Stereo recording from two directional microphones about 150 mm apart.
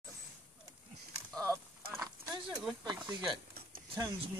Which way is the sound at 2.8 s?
30° right (ahead or behind).